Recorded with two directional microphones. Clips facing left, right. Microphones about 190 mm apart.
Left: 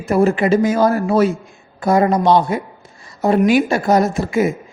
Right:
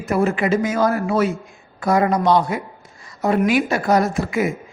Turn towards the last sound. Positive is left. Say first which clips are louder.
# left 3 dB
turn(degrees=25)  # may be behind; listen again after turning